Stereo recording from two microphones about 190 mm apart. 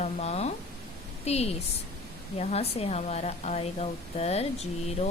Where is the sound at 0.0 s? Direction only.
35° left (ahead or behind).